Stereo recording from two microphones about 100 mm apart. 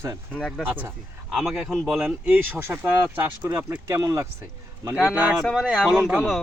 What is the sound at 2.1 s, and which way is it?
Speech, 15° right (ahead or behind).